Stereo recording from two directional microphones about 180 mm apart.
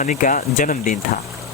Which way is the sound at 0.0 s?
45° left (ahead or behind).